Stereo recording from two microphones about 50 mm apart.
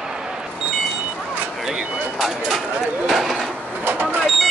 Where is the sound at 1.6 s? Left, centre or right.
Centre.